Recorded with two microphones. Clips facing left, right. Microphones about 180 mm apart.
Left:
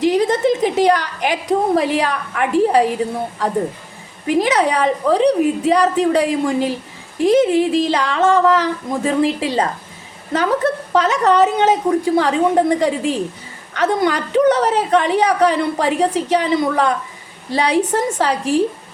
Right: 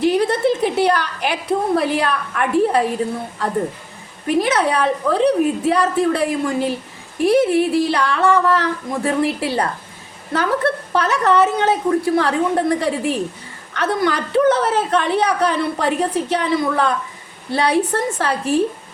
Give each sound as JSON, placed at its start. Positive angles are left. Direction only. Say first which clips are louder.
{"t": 0.0, "sound": "a sound", "louder": "left 1 dB", "side_deg": 15}
{"t": 2.6, "sound": "a woman's voice", "louder": "left 2 dB", "side_deg": 15}
{"t": 10.3, "sound": "a woman's voice", "louder": "left 2 dB", "side_deg": 20}